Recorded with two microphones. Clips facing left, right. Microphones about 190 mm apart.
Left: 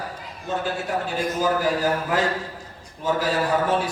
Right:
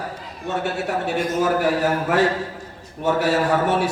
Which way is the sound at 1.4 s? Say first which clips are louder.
Right 2 dB; 70° right (ahead or behind).